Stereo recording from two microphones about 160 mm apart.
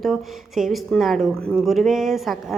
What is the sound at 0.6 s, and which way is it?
A woman's voice, centre (ahead or behind).